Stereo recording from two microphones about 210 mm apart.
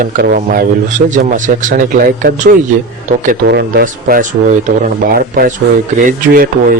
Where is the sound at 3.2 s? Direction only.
50° right (ahead or behind).